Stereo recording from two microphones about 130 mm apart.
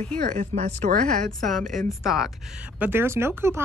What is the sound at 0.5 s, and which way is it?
Speech, 55° right (ahead or behind).